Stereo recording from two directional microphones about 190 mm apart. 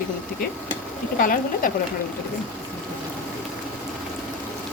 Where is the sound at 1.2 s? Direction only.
50° left (ahead or behind).